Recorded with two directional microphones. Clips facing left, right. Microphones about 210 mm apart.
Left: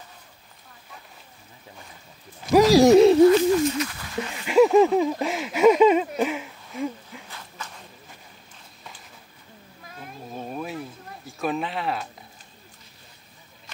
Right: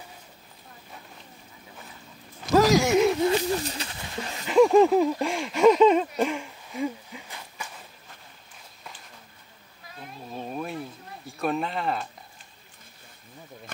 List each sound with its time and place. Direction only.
2.7 s speech: 35° left (ahead or behind)
3.3 s a sound: 30° right (ahead or behind)
4.5 s speech: 5° left (ahead or behind)
7.2 s walk: 15° right (ahead or behind)
10.3 s a sound: centre (ahead or behind)
11.2 s speech: centre (ahead or behind)